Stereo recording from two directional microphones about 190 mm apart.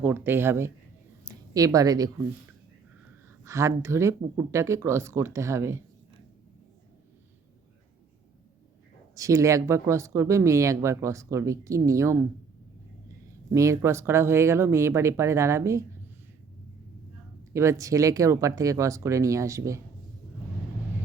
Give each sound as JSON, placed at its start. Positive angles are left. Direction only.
{"t": 0.0, "sound": "speech", "side_deg": -10}
{"t": 1.2, "sound": "a sound", "side_deg": -20}
{"t": 3.4, "sound": "speech", "side_deg": -15}
{"t": 9.1, "sound": "speech", "side_deg": -15}
{"t": 13.5, "sound": "speech", "side_deg": -15}
{"t": 17.5, "sound": "speech", "side_deg": -15}